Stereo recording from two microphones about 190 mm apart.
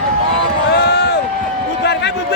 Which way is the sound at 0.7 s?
60° left (ahead or behind).